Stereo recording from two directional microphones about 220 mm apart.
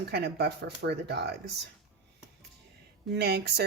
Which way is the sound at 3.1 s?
50° right (ahead or behind).